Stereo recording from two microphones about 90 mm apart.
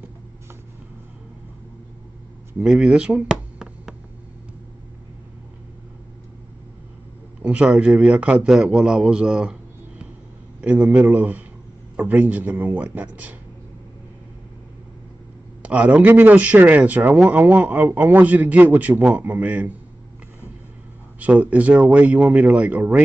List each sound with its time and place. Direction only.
2.6 s a sound: 5° right (ahead or behind)
7.4 s a man's voice: 10° right (ahead or behind)
15.6 s a man's voice: 15° right (ahead or behind)
21.2 s a man's voice: 15° right (ahead or behind)